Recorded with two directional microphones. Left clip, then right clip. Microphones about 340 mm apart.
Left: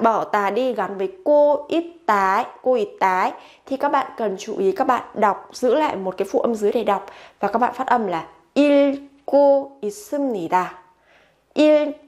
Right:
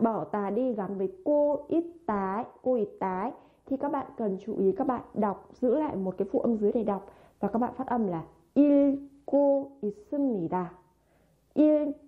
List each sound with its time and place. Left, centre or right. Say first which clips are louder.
0.0 s a woman's voice: left 11 dB; centre
1.7 s a woman's voice: left 10 dB; centre